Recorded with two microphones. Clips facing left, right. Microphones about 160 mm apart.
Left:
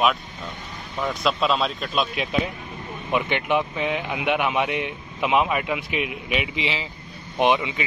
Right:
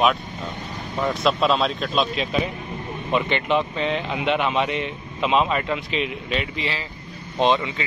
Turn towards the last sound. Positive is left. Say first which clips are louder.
# even
turn(degrees=15)  # may be behind; listen again after turning